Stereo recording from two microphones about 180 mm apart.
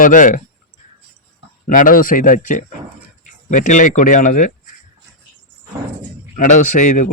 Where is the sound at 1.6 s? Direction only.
50° left (ahead or behind).